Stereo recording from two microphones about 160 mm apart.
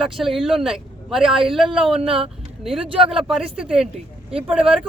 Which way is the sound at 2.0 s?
35° right (ahead or behind).